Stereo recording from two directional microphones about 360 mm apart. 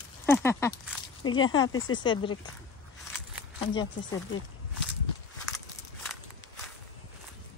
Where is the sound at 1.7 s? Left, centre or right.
Left.